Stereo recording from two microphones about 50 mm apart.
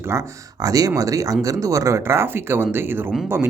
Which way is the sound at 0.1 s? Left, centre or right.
Right.